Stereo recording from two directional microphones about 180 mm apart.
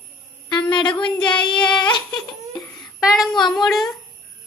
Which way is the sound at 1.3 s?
25° left (ahead or behind).